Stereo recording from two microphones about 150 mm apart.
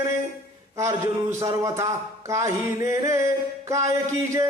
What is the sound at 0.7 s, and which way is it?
Speech, 20° right (ahead or behind).